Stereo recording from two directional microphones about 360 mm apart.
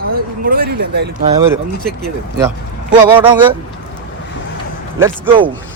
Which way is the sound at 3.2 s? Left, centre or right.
Centre.